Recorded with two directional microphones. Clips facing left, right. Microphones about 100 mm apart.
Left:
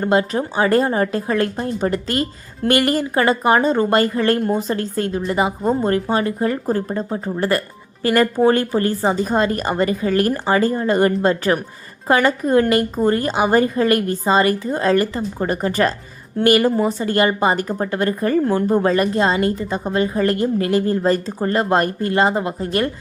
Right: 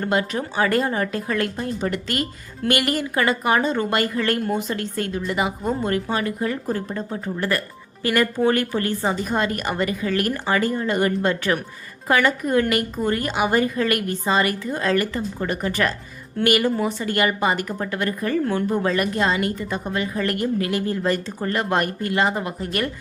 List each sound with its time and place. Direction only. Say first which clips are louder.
0.0 s a woman's voice: left 5 dB; 30° left (ahead or behind)